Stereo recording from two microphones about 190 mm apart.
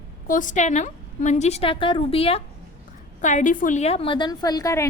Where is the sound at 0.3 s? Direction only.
45° left (ahead or behind).